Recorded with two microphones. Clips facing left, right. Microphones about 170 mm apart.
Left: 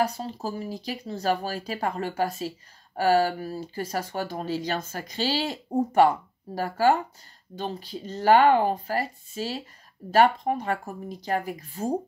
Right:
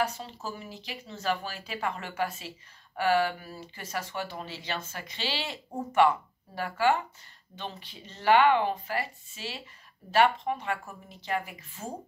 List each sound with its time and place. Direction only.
0.0 s speech: 35° left (ahead or behind)